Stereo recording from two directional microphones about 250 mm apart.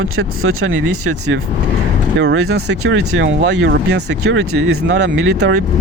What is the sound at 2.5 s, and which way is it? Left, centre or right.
Speech, right.